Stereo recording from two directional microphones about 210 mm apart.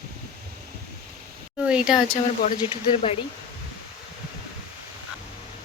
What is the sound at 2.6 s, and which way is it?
Speech, 25° left (ahead or behind).